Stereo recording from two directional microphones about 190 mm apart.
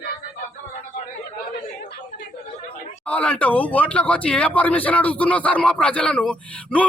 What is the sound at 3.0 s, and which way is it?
Speech, 5° left (ahead or behind).